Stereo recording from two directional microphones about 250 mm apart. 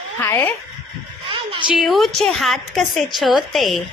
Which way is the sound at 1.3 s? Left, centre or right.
Right.